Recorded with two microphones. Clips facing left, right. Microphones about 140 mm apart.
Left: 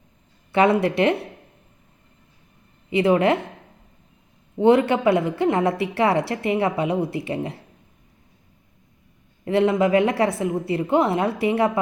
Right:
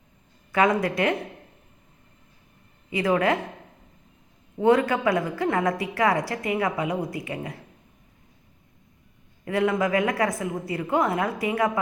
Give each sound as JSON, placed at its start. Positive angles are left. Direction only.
{"t": 0.5, "sound": "a woman's voice", "side_deg": 25}
{"t": 2.9, "sound": "a woman's voice", "side_deg": 25}
{"t": 4.6, "sound": "a woman's voice", "side_deg": 25}
{"t": 9.4, "sound": "a woman's voice", "side_deg": 30}